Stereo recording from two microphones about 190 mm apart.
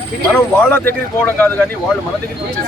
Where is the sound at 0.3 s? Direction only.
5° left (ahead or behind).